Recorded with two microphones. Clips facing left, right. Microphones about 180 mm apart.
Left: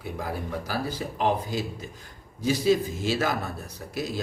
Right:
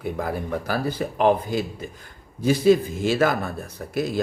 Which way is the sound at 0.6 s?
55° right (ahead or behind).